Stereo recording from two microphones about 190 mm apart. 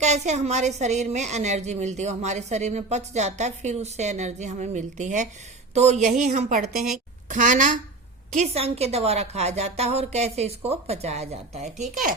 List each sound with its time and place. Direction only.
0.0 s a woman's voice: 35° right (ahead or behind)